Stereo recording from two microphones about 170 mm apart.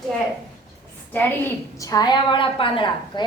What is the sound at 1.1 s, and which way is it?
A woman's voice, 10° left (ahead or behind).